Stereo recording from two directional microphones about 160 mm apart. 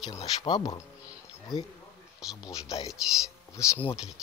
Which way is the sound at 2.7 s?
20° left (ahead or behind).